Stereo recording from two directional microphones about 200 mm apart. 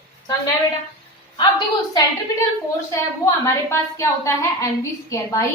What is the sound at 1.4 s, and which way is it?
A woman's voice, 20° left (ahead or behind).